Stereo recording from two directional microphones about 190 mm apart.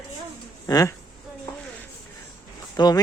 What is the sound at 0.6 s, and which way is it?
Speech, 20° left (ahead or behind).